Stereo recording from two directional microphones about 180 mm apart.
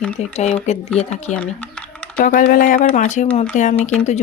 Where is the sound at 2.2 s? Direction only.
50° left (ahead or behind).